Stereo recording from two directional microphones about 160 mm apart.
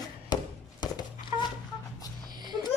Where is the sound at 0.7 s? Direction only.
25° left (ahead or behind).